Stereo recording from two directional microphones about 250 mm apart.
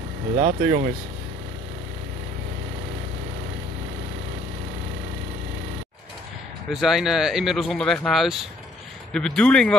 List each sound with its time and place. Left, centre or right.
0.4 s speech: right
6.7 s speech: centre